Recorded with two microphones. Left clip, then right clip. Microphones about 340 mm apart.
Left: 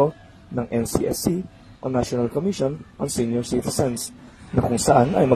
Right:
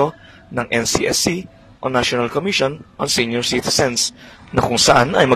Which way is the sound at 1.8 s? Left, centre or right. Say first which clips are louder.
Right 6 dB; right.